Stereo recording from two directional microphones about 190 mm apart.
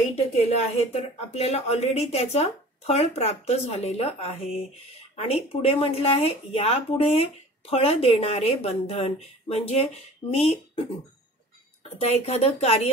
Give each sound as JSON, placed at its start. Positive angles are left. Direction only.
{"t": 0.7, "sound": "speech", "side_deg": 35}
{"t": 12.0, "sound": "speech", "side_deg": 35}